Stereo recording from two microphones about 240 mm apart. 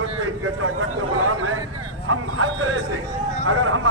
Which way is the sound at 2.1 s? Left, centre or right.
Right.